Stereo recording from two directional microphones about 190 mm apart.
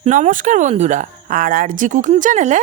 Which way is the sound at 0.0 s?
40° right (ahead or behind).